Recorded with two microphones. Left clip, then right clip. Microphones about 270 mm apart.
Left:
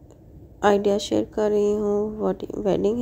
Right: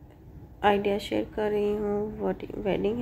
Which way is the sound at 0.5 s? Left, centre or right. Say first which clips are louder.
Left 5 dB; left.